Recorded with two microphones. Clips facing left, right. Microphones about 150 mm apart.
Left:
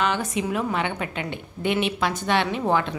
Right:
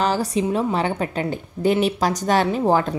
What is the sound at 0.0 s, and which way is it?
Speech, 35° right (ahead or behind).